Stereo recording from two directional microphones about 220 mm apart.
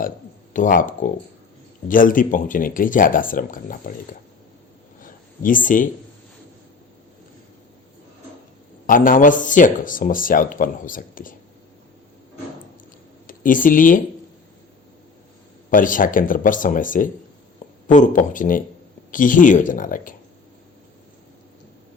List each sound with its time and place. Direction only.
0.5 s speech: 35° left (ahead or behind)
5.0 s a sound: 40° left (ahead or behind)
8.9 s speech: 40° left (ahead or behind)
13.2 s speech: 40° left (ahead or behind)
15.7 s speech: 40° left (ahead or behind)